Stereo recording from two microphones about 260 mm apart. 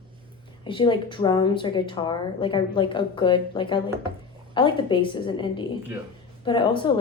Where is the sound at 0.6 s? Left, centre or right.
Centre.